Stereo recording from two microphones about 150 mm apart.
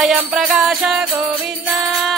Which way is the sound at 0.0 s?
5° right (ahead or behind).